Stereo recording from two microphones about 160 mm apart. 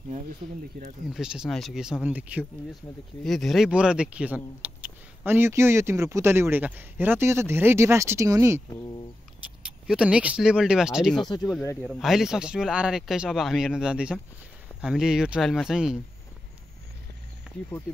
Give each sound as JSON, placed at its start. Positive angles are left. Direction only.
{"t": 1.1, "sound": "speech", "side_deg": -5}
{"t": 8.6, "sound": "speech", "side_deg": 30}
{"t": 9.6, "sound": "speech", "side_deg": -5}
{"t": 11.1, "sound": "speech", "side_deg": 25}
{"t": 11.6, "sound": "speech", "side_deg": 15}
{"t": 11.9, "sound": "speech", "side_deg": -5}